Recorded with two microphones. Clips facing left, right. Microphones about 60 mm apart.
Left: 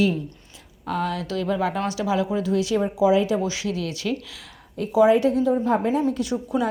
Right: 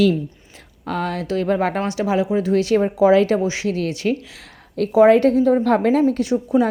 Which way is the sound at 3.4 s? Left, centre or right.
Right.